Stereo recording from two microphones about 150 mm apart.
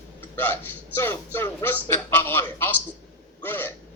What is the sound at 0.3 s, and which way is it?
A man's voice, 15° left (ahead or behind).